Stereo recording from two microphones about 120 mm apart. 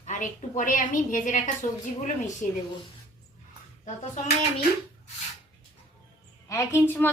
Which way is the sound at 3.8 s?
90° left.